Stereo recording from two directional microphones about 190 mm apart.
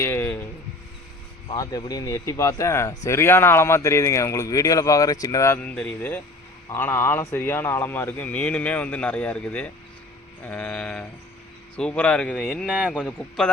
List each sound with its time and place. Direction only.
0.0 s a sound: 10° left (ahead or behind)
1.5 s speech: 20° left (ahead or behind); by 12.9 s 5° right (ahead or behind)
12.9 s speech: 5° left (ahead or behind)